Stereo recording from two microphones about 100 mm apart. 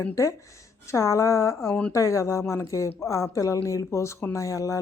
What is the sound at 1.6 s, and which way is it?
Speech, 20° left (ahead or behind).